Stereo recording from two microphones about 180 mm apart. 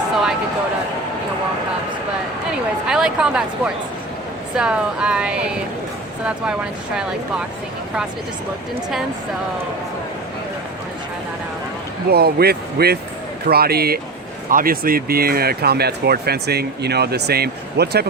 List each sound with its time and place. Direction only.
2.8 s speech: 5° right (ahead or behind)
12.1 s speech: 60° right (ahead or behind)